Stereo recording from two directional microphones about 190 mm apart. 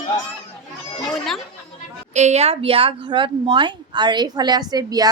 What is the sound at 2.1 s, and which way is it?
Speech, 35° right (ahead or behind).